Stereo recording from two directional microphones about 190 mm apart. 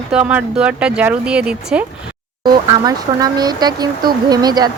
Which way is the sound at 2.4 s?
20° right (ahead or behind).